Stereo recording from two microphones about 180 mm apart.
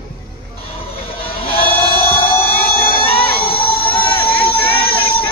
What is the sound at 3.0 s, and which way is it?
Music, 30° left (ahead or behind).